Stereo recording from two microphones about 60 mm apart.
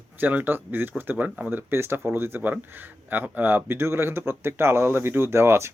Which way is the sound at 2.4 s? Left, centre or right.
Right.